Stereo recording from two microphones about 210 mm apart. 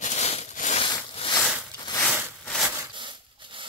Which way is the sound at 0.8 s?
25° left (ahead or behind).